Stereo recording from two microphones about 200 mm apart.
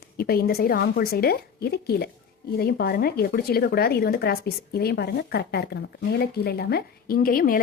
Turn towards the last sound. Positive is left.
turn(degrees=45)  # may be behind; listen again after turning